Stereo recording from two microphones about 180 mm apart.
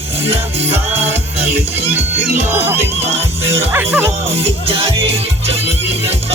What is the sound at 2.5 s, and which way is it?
Speech, 10° right (ahead or behind).